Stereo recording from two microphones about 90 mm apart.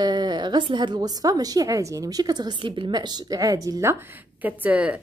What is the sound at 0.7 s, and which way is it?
A woman's voice, 60° right (ahead or behind).